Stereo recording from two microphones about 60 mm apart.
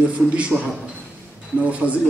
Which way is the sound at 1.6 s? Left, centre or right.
Right.